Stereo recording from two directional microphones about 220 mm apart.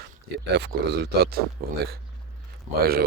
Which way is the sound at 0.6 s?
50° right (ahead or behind).